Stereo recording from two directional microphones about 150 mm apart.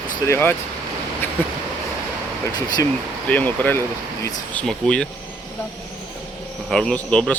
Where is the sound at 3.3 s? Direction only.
10° left (ahead or behind).